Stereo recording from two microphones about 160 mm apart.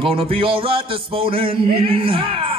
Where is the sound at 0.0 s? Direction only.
35° right (ahead or behind).